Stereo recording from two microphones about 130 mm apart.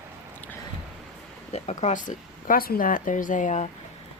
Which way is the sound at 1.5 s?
55° left (ahead or behind).